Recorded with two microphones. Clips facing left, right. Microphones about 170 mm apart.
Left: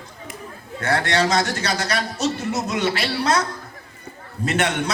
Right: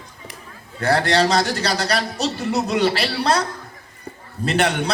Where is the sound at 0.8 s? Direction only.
35° right (ahead or behind).